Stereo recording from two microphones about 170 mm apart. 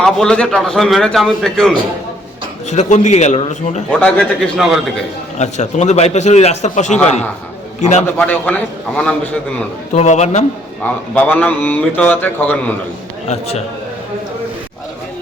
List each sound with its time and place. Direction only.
0.0 s a man's voice: 5° left (ahead or behind)
2.6 s a man's voice: 45° left (ahead or behind)
4.0 s a man's voice: 5° left (ahead or behind)
5.4 s a man's voice: 45° left (ahead or behind)
8.0 s speech: 10° left (ahead or behind)
9.9 s a man's voice: 40° left (ahead or behind)
10.8 s speech: 10° left (ahead or behind)
13.2 s a man's voice: 40° left (ahead or behind)